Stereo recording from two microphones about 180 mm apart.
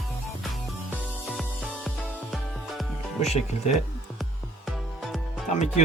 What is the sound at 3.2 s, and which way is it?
Speech, 40° left (ahead or behind).